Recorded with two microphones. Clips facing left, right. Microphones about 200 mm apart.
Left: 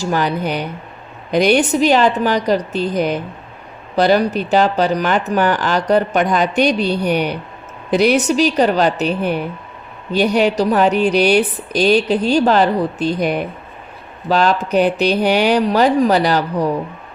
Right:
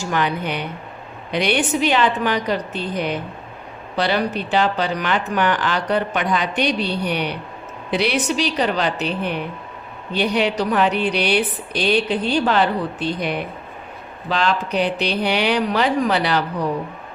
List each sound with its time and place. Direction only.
0.0 s a woman's voice: 40° left (ahead or behind)